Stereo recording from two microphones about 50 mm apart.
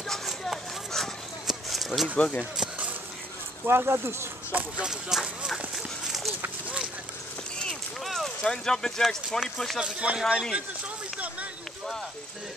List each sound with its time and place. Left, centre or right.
0.5 s a sound: centre
2.1 s speech: left
3.6 s speech: right
4.5 s speech: right
4.8 s speech: centre
8.0 s a sound: centre
8.4 s speech: centre
9.8 s speech: right